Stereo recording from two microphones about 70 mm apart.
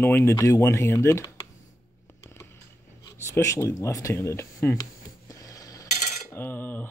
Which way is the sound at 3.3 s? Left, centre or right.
Left.